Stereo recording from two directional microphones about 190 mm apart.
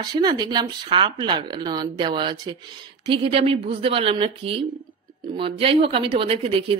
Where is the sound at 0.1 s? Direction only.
20° right (ahead or behind).